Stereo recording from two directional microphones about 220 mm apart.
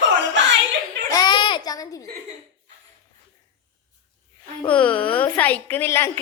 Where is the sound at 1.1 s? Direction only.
20° left (ahead or behind).